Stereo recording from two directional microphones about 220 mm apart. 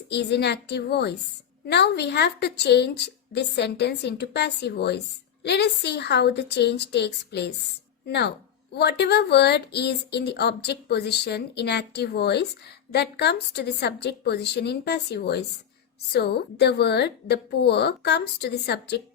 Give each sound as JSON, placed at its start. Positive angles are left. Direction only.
{"t": 0.1, "sound": "a woman's voice", "side_deg": 50}